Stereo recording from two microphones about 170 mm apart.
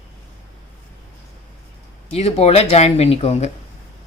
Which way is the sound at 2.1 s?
40° left (ahead or behind).